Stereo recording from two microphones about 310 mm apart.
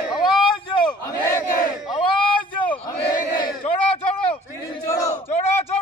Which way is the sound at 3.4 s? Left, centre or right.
Centre.